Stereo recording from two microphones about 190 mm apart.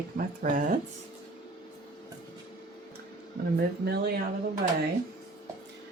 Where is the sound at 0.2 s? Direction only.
45° right (ahead or behind).